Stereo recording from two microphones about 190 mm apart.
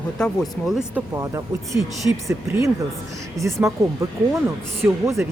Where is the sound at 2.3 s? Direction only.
15° right (ahead or behind).